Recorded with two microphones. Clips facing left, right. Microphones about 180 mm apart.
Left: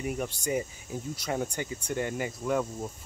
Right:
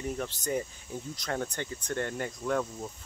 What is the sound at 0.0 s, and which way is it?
Speech, 10° left (ahead or behind).